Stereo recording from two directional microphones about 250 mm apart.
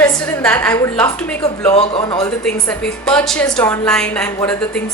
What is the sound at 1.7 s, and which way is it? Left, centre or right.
Speech, left.